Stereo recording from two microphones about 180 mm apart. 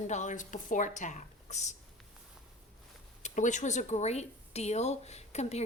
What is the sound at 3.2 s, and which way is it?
A woman's voice, 40° left (ahead or behind).